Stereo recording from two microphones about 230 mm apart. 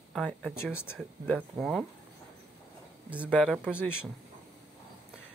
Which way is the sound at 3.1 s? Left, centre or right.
Centre.